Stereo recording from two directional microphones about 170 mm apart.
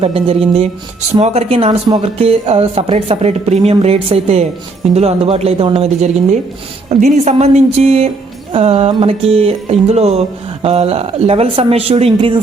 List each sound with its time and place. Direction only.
0.0 s music: 35° right (ahead or behind)